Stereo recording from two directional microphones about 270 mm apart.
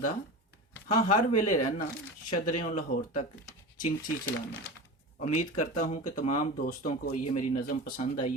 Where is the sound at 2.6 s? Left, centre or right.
Left.